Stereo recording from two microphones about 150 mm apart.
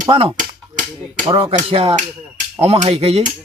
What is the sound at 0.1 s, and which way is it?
Speech, 40° right (ahead or behind).